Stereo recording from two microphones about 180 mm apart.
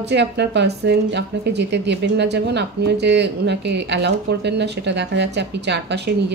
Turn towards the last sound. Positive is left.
turn(degrees=-70)  # may be behind; listen again after turning